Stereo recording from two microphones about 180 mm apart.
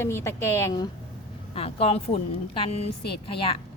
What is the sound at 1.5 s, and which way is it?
Speech, 30° left (ahead or behind).